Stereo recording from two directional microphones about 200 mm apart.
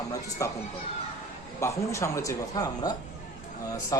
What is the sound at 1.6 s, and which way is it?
Speech, 15° left (ahead or behind).